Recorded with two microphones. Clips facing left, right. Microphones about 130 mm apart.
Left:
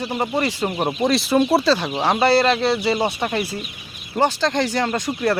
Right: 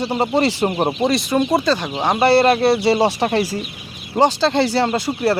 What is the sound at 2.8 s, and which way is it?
Speech, 30° right (ahead or behind).